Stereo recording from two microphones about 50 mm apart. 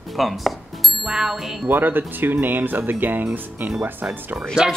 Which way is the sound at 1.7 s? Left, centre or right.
Right.